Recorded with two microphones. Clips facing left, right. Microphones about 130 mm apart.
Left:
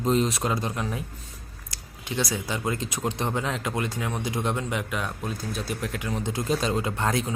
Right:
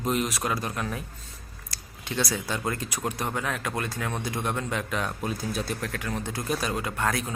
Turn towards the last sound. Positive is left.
turn(degrees=25)  # may be behind; listen again after turning